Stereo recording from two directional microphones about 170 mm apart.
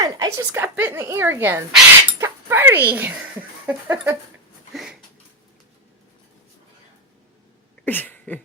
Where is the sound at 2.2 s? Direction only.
15° right (ahead or behind).